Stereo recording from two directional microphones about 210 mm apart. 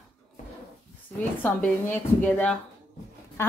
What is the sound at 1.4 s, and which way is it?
A woman's voice, 10° left (ahead or behind).